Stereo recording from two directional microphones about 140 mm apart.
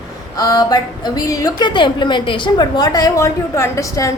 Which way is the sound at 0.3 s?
25° left (ahead or behind).